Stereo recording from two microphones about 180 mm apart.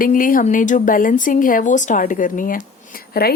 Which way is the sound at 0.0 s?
50° left (ahead or behind).